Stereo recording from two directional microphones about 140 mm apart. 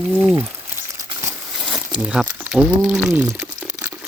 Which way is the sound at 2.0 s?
5° right (ahead or behind).